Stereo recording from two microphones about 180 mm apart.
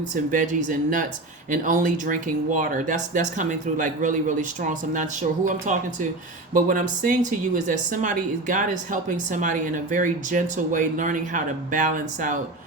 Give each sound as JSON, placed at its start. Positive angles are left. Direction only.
{"t": 0.1, "sound": "speech", "side_deg": -45}